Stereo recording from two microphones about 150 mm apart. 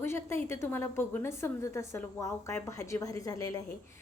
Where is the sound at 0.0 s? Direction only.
15° left (ahead or behind).